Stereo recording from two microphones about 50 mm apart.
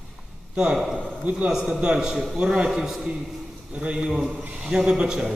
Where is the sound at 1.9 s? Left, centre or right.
Centre.